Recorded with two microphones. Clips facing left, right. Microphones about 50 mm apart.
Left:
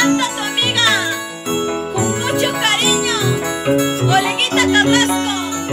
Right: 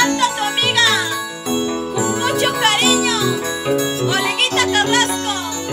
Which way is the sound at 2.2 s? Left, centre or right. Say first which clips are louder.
Right 3 dB; centre.